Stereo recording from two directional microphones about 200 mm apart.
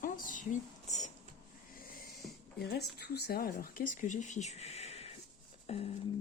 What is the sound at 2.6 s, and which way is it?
Speech, 55° left (ahead or behind).